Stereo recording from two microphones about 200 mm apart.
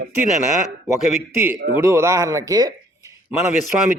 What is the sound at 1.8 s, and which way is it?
A man's voice, 15° right (ahead or behind).